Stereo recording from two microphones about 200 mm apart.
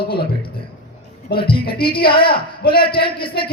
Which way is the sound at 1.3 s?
25° left (ahead or behind).